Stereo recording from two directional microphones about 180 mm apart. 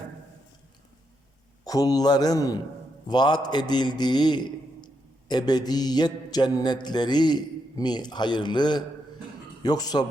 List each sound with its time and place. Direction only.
1.6 s mantra: 20° left (ahead or behind)